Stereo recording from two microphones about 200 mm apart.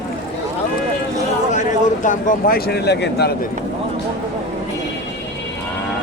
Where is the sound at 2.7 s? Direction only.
55° left (ahead or behind).